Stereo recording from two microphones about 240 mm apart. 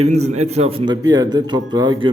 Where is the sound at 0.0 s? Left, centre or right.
Right.